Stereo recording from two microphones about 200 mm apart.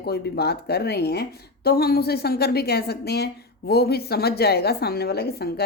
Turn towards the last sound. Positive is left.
turn(degrees=55)  # may be behind; listen again after turning